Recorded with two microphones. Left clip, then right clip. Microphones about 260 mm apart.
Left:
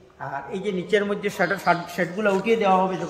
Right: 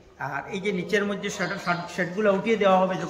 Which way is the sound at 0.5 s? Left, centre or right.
Centre.